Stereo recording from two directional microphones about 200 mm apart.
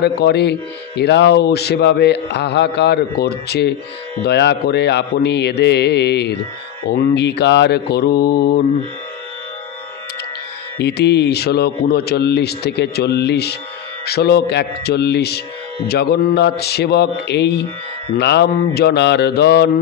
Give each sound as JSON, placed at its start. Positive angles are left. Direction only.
{"t": 0.0, "sound": "speech", "side_deg": 55}
{"t": 6.9, "sound": "mantra", "side_deg": 55}
{"t": 10.8, "sound": "speech", "side_deg": 55}